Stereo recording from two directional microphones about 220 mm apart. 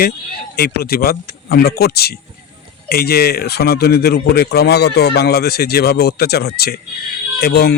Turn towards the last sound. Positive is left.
turn(degrees=45)  # may be behind; listen again after turning